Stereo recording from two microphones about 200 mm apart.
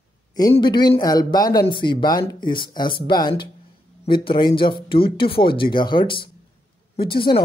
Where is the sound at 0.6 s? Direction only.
20° left (ahead or behind).